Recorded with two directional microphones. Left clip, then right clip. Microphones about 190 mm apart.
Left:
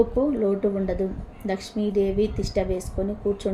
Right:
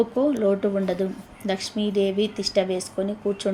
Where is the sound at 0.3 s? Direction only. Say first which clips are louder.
Right 1 dB; 15° right (ahead or behind).